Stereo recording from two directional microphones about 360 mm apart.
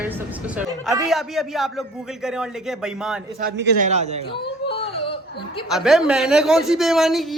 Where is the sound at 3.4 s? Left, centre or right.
Right.